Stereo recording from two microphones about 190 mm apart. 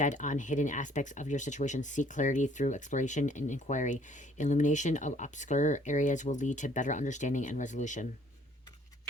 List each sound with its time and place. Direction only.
0.0 s speech: 40° left (ahead or behind)